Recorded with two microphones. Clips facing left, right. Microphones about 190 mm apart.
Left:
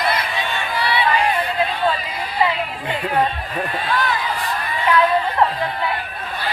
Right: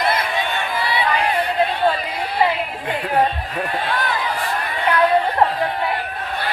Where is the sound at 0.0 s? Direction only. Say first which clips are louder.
Right 2 dB; 50° right (ahead or behind).